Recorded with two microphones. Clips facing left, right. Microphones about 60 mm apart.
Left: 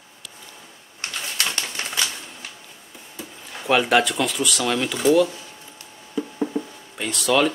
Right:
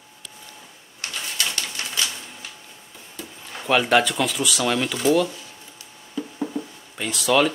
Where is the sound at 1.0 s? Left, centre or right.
Left.